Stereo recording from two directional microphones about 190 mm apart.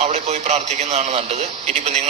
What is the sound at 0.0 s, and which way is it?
A man's voice, 35° right (ahead or behind).